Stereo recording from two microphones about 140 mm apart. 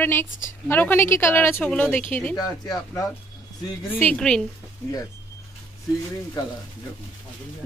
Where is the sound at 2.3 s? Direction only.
30° left (ahead or behind).